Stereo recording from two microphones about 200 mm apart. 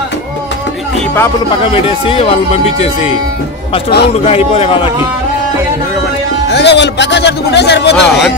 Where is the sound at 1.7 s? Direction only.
25° left (ahead or behind).